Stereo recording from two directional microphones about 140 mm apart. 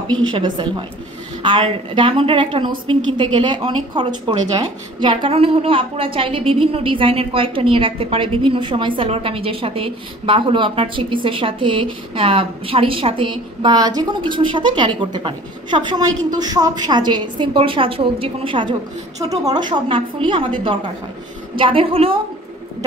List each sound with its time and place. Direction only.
0.1 s a woman's voice: 35° right (ahead or behind)